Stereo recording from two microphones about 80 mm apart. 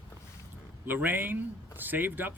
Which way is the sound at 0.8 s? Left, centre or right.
Right.